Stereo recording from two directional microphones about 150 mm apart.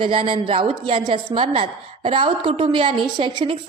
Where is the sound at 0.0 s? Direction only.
35° right (ahead or behind).